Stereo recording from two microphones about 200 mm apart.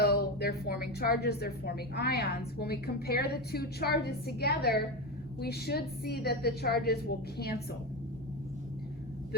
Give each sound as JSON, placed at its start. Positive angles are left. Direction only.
{"t": 0.0, "sound": "speech", "side_deg": 50}